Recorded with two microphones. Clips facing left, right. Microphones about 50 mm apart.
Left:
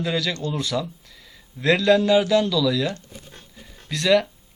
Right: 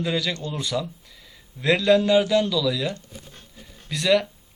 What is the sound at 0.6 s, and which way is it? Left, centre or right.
Speech, centre.